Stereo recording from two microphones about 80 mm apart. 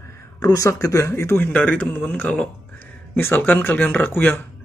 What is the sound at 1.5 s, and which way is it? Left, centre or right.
Speech, centre.